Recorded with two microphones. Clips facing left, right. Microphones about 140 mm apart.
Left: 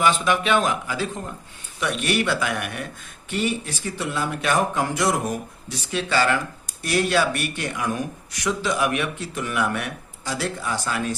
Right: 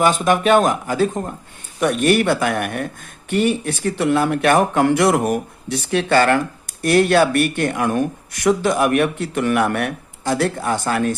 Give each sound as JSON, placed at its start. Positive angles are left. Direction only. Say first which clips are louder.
{"t": 0.0, "sound": "speech", "louder": "right 5 dB", "side_deg": -45}